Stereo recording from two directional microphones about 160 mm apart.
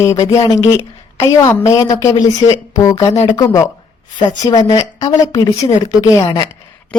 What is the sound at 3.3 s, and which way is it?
A woman's voice, 20° left (ahead or behind).